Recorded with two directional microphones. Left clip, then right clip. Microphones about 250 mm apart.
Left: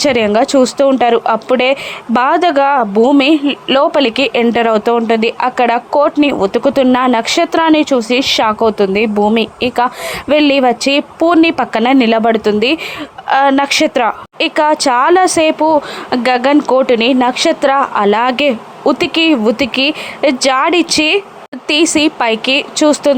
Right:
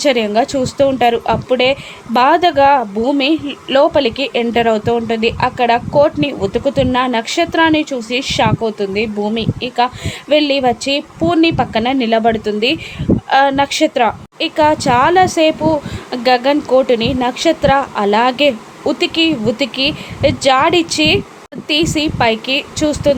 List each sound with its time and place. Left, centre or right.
0.0 s a woman's voice: centre